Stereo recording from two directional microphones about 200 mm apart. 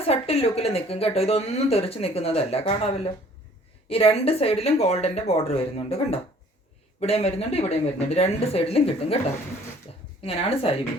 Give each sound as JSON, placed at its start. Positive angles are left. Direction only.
{"t": 0.1, "sound": "speech", "side_deg": 30}
{"t": 10.2, "sound": "speech", "side_deg": 30}